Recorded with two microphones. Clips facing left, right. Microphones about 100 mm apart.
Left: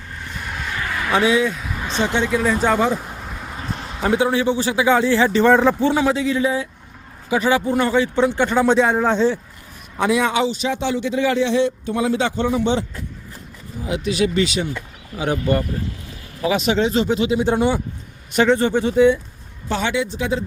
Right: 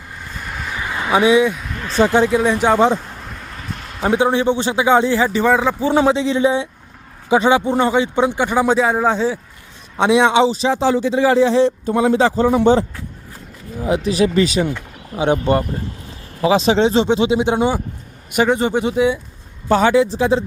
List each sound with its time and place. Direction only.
0.2 s vehicle: 5° right (ahead or behind)
0.8 s a sound: 20° right (ahead or behind)
1.5 s a sound: 5° left (ahead or behind)
2.1 s a man's voice: 35° right (ahead or behind)
2.4 s speech: 20° right (ahead or behind)
3.0 s a sound: 10° left (ahead or behind)
4.1 s speech: 25° right (ahead or behind)
5.2 s speech: 10° right (ahead or behind)
5.9 s speech: 25° right (ahead or behind); by 9.4 s 5° right (ahead or behind)
10.0 s a man's voice: 25° right (ahead or behind); by 12.8 s 45° right (ahead or behind)
13.8 s a man's voice: 35° right (ahead or behind)
15.1 s speech: 25° right (ahead or behind); by 19.2 s 10° right (ahead or behind)
19.6 s a man's voice: 40° right (ahead or behind)